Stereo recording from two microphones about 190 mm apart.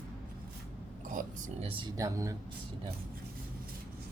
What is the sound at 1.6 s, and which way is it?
Speech, 25° right (ahead or behind).